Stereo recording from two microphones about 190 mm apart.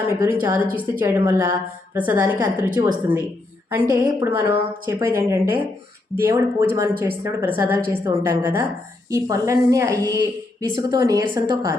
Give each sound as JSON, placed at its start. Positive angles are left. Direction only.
{"t": 0.1, "sound": "a woman's voice", "side_deg": -10}